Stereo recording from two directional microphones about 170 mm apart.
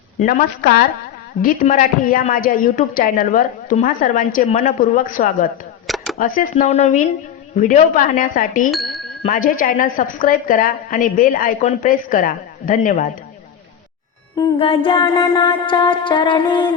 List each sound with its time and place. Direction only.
0.3 s a woman's voice: 60° left (ahead or behind)
6.5 s a woman's voice: 40° left (ahead or behind)
8.7 s a sound: centre (ahead or behind)
9.3 s a woman's voice: 55° left (ahead or behind)
14.3 s mantra: 30° left (ahead or behind)